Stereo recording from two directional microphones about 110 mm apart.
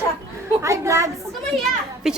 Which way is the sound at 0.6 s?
30° right (ahead or behind).